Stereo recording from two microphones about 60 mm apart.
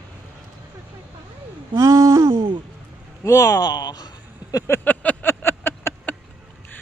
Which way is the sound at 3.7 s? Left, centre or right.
Left.